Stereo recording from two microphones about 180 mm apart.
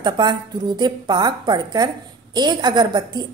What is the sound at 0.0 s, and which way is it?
A woman's voice, 25° right (ahead or behind).